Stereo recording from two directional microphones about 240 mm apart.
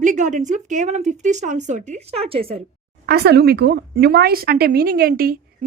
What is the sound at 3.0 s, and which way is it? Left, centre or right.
A woman's voice, right.